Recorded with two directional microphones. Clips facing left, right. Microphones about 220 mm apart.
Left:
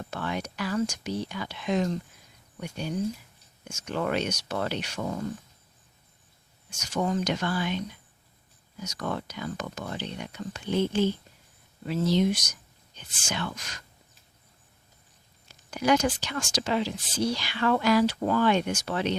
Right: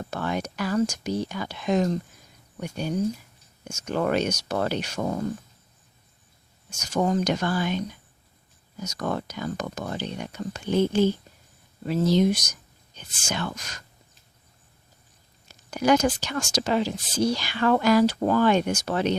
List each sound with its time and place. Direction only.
0.0 s speech: 40° right (ahead or behind)
6.7 s speech: 40° right (ahead or behind)
15.4 s speech: 45° right (ahead or behind)